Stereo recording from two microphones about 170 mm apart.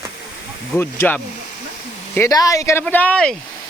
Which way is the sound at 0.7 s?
15° left (ahead or behind).